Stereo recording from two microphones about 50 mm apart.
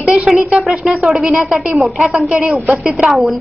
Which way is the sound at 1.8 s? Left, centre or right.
Centre.